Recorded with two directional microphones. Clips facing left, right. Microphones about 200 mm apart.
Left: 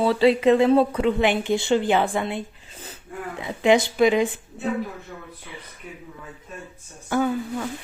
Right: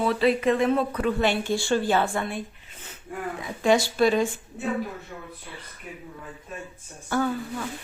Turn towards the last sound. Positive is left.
turn(degrees=20)  # may be behind; listen again after turning